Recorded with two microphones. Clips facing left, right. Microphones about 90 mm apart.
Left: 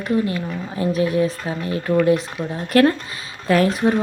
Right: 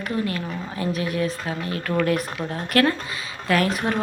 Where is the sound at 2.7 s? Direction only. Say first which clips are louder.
Left 5 dB; 30° left (ahead or behind).